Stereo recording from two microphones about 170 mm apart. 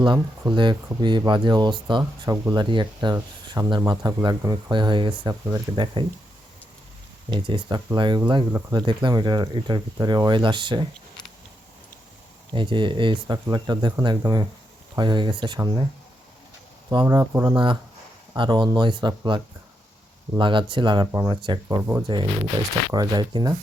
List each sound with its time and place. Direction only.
0.0 s speech: 30° right (ahead or behind)
7.3 s speech: 30° right (ahead or behind)
12.5 s speech: 30° right (ahead or behind)
16.9 s speech: 25° right (ahead or behind)
20.4 s speech: 30° right (ahead or behind)
21.8 s speech: 15° right (ahead or behind)
22.0 s speech: 25° right (ahead or behind)